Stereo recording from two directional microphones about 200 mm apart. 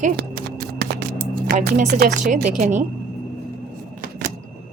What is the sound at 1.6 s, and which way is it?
Speech, 55° right (ahead or behind).